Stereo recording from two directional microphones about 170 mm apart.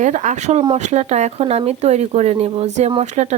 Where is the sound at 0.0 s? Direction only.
45° right (ahead or behind).